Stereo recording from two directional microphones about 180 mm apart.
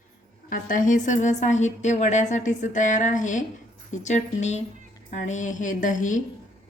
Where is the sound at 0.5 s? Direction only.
45° left (ahead or behind).